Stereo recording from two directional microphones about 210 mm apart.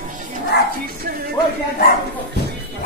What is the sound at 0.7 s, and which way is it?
Speech, 45° right (ahead or behind).